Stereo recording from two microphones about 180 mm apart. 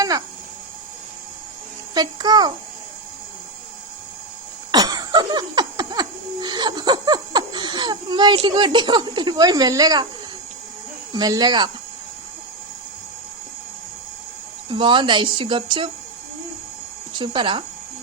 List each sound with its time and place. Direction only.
2.0 s speech: 25° right (ahead or behind)
4.7 s a sound: 20° right (ahead or behind)
11.1 s speech: 20° right (ahead or behind)
14.7 s speech: 25° right (ahead or behind)
17.2 s speech: 25° right (ahead or behind)